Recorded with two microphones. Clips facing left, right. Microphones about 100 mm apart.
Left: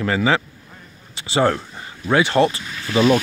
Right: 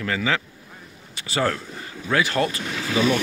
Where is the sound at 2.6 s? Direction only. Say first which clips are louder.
Right 4 dB; 90° right.